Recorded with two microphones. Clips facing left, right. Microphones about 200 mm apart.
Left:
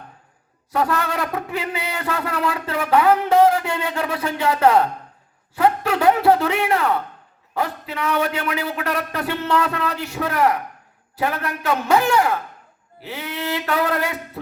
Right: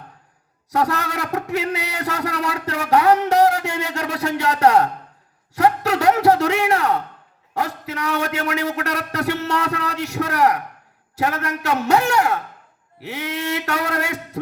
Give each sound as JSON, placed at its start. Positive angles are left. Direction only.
{"t": 0.7, "sound": "a man's voice", "side_deg": -75}